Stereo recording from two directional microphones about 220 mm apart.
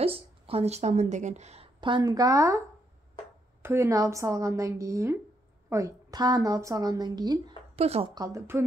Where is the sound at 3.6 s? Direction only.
10° right (ahead or behind).